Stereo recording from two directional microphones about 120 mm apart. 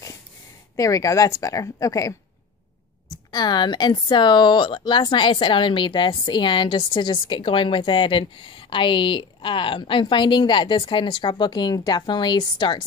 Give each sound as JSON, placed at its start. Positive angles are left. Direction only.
{"t": 0.7, "sound": "a woman's voice", "side_deg": 30}
{"t": 3.3, "sound": "speech", "side_deg": 35}